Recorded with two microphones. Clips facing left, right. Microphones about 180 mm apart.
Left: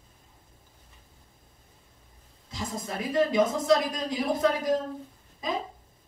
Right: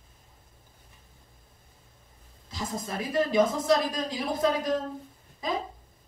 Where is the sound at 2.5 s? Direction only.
20° left (ahead or behind).